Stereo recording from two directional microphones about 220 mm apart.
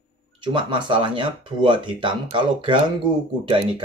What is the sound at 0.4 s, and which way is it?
Speech, 20° right (ahead or behind).